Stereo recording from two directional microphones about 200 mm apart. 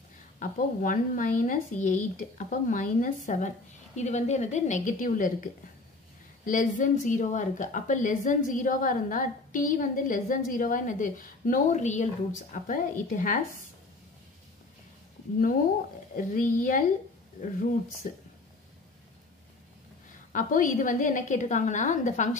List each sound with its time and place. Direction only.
0.4 s speech: 40° left (ahead or behind)
16.2 s speech: 40° left (ahead or behind)
20.1 s speech: 40° left (ahead or behind)